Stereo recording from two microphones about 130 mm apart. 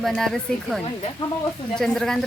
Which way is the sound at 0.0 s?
Centre (ahead or behind).